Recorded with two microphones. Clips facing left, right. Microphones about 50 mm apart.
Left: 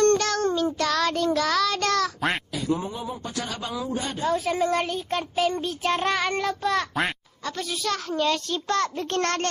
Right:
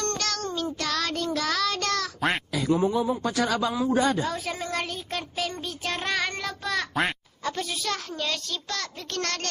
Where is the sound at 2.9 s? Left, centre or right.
Right.